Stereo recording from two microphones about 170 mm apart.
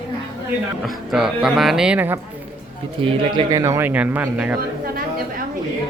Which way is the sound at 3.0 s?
30° right (ahead or behind).